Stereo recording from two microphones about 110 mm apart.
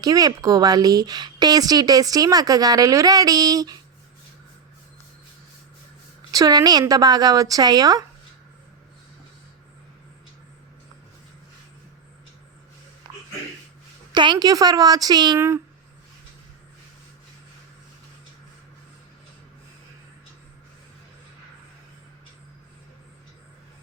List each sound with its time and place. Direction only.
0.0 s speech: 35° right (ahead or behind)
6.3 s speech: 35° right (ahead or behind)
14.1 s speech: 45° right (ahead or behind)
15.4 s speech: 25° right (ahead or behind)